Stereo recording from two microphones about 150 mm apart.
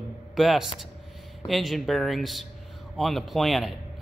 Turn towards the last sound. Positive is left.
turn(degrees=0)  # may be behind; listen again after turning